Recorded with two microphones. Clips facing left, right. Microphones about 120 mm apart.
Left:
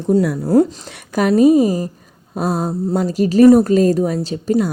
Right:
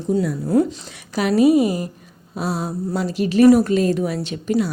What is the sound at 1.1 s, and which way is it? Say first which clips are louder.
Speech: left 3 dB; 45° left (ahead or behind).